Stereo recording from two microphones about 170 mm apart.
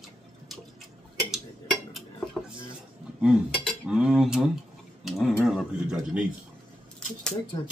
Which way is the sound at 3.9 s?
5° right (ahead or behind).